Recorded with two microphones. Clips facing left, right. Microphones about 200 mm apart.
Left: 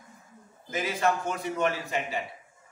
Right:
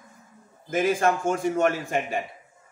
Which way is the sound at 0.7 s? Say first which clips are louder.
Right 5 dB; 50° right (ahead or behind).